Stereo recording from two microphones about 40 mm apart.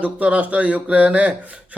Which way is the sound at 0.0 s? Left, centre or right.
Right.